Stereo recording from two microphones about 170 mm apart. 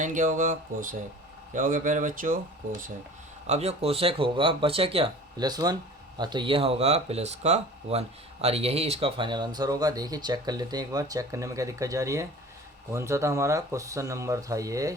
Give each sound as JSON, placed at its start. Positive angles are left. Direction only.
{"t": 0.0, "sound": "speech", "side_deg": -50}
{"t": 3.4, "sound": "speech", "side_deg": -40}